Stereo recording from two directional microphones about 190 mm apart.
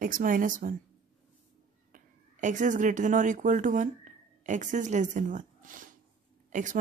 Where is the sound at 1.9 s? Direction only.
40° right (ahead or behind).